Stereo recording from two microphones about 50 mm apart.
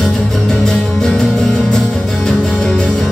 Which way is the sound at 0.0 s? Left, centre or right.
Centre.